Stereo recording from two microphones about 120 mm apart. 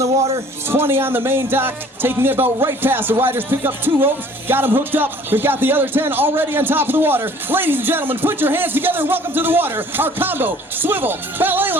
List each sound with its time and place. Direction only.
0.7 s speech: 20° right (ahead or behind)